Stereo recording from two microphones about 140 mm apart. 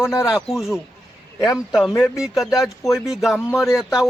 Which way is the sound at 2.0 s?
Centre (ahead or behind).